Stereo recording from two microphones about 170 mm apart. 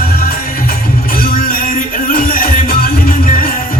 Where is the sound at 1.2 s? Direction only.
60° left (ahead or behind).